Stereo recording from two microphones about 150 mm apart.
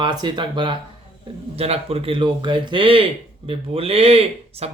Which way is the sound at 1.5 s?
40° right (ahead or behind).